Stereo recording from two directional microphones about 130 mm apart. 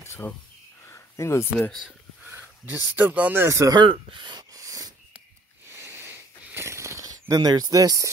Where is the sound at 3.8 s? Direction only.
40° right (ahead or behind).